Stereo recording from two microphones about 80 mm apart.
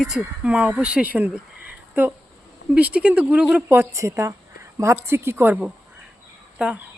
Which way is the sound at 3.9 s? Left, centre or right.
Right.